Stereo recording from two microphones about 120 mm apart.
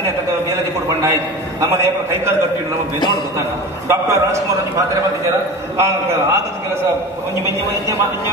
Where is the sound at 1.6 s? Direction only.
25° right (ahead or behind).